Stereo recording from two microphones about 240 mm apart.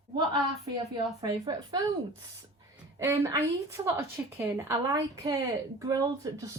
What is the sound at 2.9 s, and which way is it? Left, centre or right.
A woman's voice, centre.